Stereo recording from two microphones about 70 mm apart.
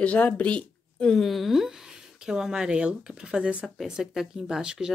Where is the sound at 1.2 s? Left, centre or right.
Centre.